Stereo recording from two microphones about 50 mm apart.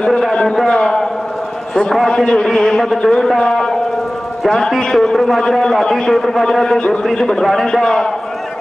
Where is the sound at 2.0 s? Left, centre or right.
Centre.